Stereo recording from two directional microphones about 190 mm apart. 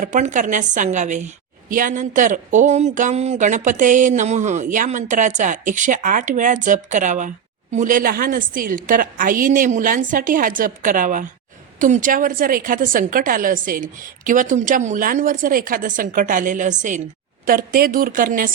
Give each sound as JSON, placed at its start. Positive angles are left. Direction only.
{"t": 0.0, "sound": "a woman's voice", "side_deg": -40}